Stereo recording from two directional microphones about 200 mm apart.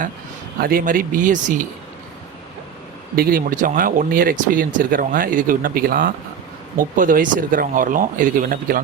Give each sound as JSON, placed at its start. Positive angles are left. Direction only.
{"t": 0.6, "sound": "speech", "side_deg": -45}
{"t": 3.2, "sound": "speech", "side_deg": -45}